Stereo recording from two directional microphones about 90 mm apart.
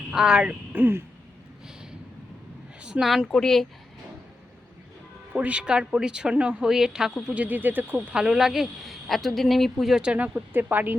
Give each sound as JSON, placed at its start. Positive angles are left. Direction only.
{"t": 0.1, "sound": "speech", "side_deg": -5}
{"t": 0.7, "sound": "speech", "side_deg": -25}
{"t": 2.8, "sound": "a woman's voice", "side_deg": -5}
{"t": 5.3, "sound": "speech", "side_deg": -15}
{"t": 7.3, "sound": "speech", "side_deg": -15}
{"t": 8.2, "sound": "a woman's voice", "side_deg": -5}